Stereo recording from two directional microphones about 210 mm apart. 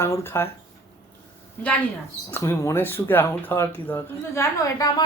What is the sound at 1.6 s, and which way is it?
Speech, 10° left (ahead or behind).